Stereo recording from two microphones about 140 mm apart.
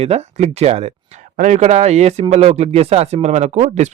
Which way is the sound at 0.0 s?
50° right (ahead or behind).